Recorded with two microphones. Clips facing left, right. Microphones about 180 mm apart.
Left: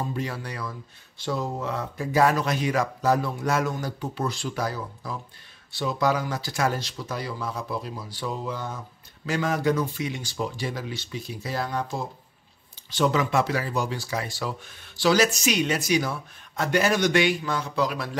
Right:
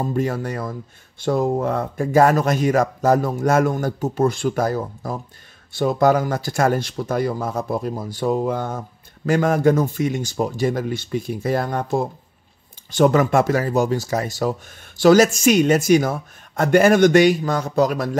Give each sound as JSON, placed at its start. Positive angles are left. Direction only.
{"t": 0.0, "sound": "speech", "side_deg": -45}